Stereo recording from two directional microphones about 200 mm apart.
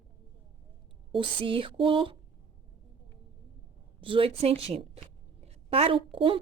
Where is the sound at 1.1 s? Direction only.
25° right (ahead or behind).